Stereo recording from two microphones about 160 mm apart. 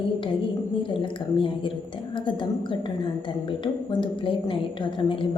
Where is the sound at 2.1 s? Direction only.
30° left (ahead or behind).